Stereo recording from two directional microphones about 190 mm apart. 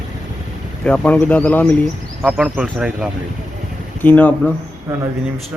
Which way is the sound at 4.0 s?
10° left (ahead or behind).